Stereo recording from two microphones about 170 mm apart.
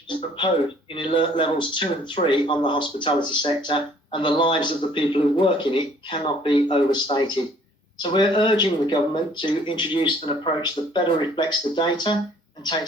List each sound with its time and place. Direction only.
0.9 s speech: 30° left (ahead or behind)